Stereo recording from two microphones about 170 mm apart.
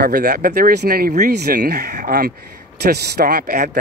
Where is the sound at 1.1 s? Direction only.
55° right (ahead or behind).